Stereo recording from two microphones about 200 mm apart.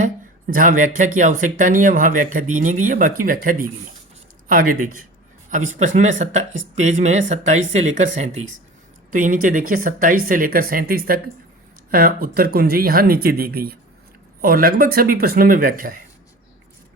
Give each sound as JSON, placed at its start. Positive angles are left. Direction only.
{"t": 0.5, "sound": "speech", "side_deg": -45}